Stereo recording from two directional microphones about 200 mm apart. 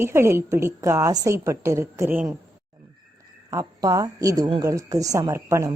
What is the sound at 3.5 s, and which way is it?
A woman's voice, 20° right (ahead or behind).